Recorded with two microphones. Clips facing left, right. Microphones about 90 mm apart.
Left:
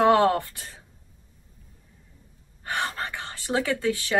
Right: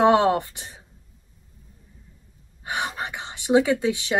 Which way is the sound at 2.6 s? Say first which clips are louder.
Right 1 dB; 15° right (ahead or behind).